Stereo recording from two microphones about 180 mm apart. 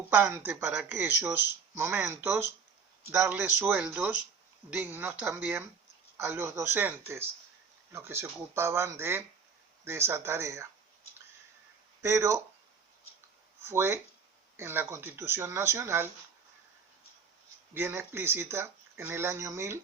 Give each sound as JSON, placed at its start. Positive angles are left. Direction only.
{"t": 0.1, "sound": "speech", "side_deg": -10}
{"t": 12.0, "sound": "speech", "side_deg": -15}
{"t": 13.7, "sound": "speech", "side_deg": -15}
{"t": 17.7, "sound": "speech", "side_deg": -15}